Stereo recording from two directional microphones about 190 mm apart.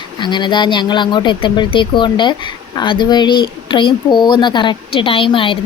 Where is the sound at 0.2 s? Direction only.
25° left (ahead or behind).